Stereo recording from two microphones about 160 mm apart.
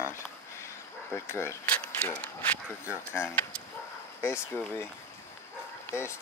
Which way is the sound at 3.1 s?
15° left (ahead or behind).